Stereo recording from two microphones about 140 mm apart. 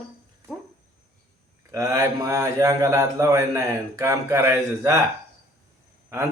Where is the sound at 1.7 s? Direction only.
25° right (ahead or behind).